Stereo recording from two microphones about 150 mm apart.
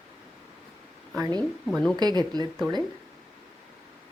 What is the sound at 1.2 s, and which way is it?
Speech, 25° right (ahead or behind).